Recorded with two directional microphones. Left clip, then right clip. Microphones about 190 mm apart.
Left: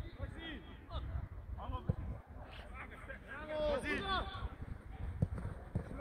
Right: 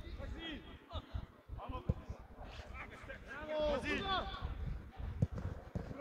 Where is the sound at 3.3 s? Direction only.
35° left (ahead or behind).